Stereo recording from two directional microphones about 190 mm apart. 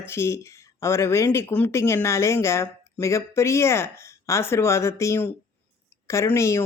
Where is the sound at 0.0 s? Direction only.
15° left (ahead or behind).